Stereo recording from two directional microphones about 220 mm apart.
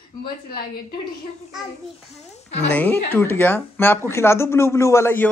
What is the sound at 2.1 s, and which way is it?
Speech, 30° left (ahead or behind).